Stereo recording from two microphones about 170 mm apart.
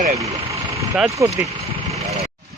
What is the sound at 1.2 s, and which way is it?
Speech, 15° right (ahead or behind).